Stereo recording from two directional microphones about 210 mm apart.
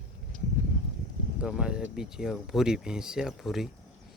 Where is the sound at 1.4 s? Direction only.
5° right (ahead or behind).